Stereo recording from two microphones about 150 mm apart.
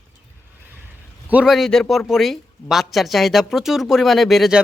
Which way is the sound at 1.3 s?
5° right (ahead or behind).